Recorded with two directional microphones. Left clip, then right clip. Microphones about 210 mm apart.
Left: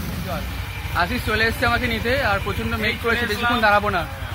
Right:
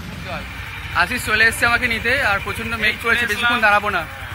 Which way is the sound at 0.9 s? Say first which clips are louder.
Right 4 dB; 15° right (ahead or behind).